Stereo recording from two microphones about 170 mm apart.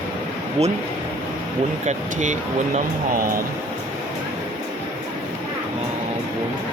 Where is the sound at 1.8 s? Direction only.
45° right (ahead or behind).